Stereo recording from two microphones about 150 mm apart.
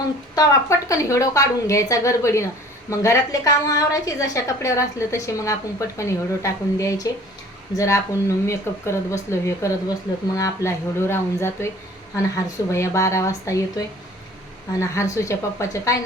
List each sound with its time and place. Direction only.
0.3 s a woman's voice: 20° left (ahead or behind)
12.7 s a woman's voice: 20° left (ahead or behind)